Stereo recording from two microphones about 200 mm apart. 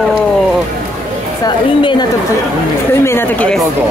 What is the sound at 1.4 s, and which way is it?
Speech, 20° left (ahead or behind).